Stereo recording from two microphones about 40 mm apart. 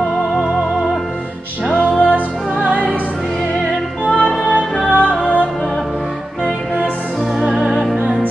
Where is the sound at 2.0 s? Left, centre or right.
Right.